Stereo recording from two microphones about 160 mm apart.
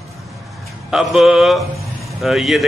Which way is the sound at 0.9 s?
Centre (ahead or behind).